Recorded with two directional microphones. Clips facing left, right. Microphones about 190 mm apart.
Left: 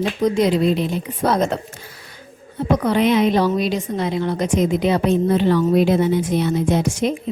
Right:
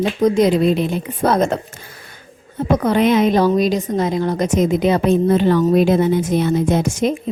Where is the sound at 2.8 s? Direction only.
45° right (ahead or behind).